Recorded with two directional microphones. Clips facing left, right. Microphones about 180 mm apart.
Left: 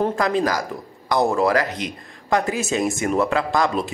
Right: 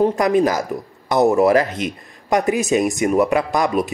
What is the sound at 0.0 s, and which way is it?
A man's voice, 20° right (ahead or behind).